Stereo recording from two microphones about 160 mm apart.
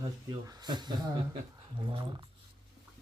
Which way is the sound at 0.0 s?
25° right (ahead or behind).